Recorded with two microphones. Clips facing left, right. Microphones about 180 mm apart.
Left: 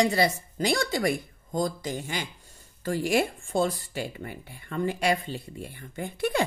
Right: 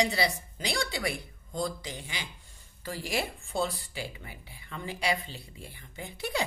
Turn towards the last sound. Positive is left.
turn(degrees=55)  # may be behind; listen again after turning